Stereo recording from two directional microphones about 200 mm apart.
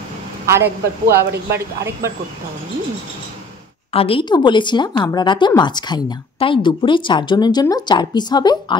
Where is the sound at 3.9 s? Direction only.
30° left (ahead or behind).